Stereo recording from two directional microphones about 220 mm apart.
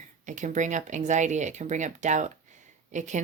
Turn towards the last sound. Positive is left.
turn(degrees=-35)  # may be behind; listen again after turning